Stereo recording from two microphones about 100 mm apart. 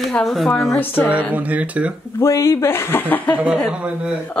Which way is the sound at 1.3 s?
15° right (ahead or behind).